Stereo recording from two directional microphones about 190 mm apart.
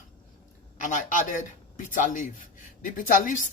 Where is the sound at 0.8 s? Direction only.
40° left (ahead or behind).